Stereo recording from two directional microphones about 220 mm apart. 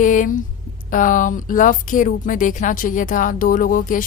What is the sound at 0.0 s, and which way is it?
A woman's voice, 35° left (ahead or behind).